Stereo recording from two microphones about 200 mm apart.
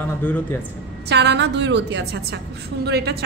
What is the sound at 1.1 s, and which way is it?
A woman's voice, 60° right (ahead or behind).